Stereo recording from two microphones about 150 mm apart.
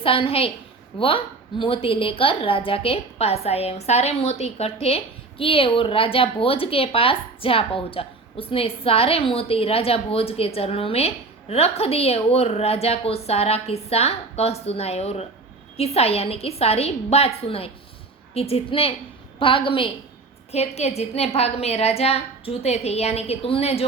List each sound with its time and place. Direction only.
0.0 s a woman's voice: 40° left (ahead or behind)
20.5 s a woman's voice: 45° left (ahead or behind)